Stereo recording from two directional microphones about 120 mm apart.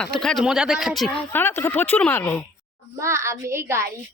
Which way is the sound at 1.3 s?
20° left (ahead or behind).